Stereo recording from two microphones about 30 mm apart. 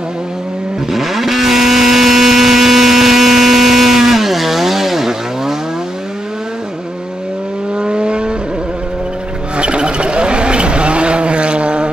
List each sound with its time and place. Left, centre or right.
0.9 s vehicle: centre
7.7 s vehicle: right
9.6 s vehicle: right